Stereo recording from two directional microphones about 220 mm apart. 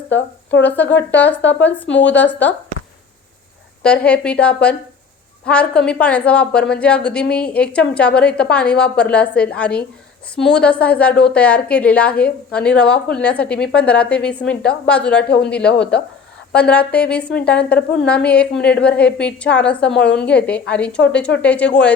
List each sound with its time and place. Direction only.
0.6 s speech: 10° left (ahead or behind)
1.4 s a woman's voice: 55° left (ahead or behind)
2.0 s speech: 10° left (ahead or behind)
3.8 s a woman's voice: 5° left (ahead or behind)
20.0 s a woman's voice: 50° left (ahead or behind)
20.2 s a woman's voice: 5° left (ahead or behind)